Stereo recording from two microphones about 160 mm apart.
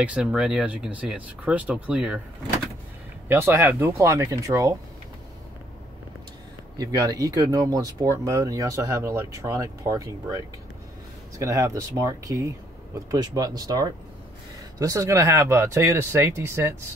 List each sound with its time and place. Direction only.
0.0 s speech: 5° right (ahead or behind)
3.3 s speech: 15° right (ahead or behind)
6.8 s speech: 20° right (ahead or behind)